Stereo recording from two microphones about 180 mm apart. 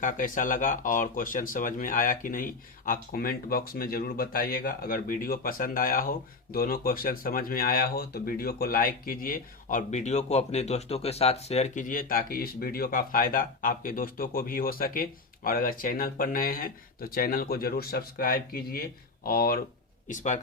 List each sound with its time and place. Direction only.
0.0 s speech: 45° left (ahead or behind)
20.1 s speech: 45° left (ahead or behind)